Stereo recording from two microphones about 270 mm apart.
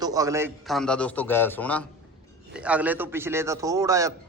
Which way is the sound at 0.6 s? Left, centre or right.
Centre.